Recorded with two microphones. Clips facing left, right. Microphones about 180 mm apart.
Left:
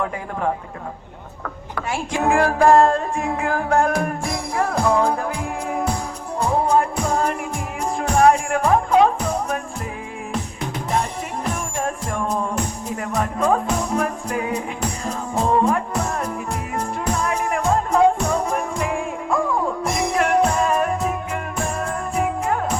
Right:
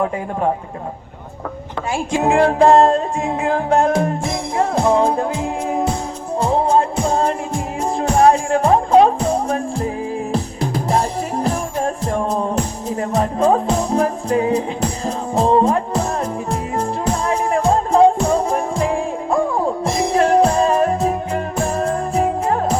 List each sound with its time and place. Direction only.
1.9 s music: 25° right (ahead or behind)